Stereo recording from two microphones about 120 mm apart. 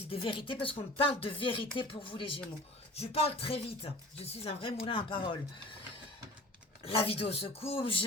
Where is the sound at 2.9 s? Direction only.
55° left (ahead or behind).